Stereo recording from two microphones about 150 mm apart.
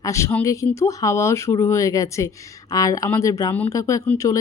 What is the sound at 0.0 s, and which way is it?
Speech, 20° left (ahead or behind).